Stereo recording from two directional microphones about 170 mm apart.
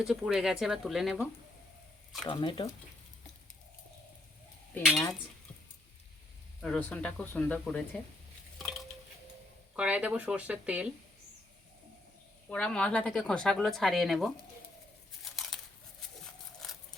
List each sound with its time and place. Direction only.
0.0 s speech: centre (ahead or behind)
2.2 s speech: 30° left (ahead or behind)
6.6 s speech: 5° left (ahead or behind)
8.5 s a sound: centre (ahead or behind)
9.7 s speech: 5° right (ahead or behind)
12.5 s speech: 5° left (ahead or behind)
15.2 s a sound: centre (ahead or behind)